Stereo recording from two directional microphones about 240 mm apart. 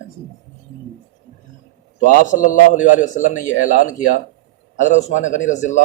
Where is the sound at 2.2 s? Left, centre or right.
Left.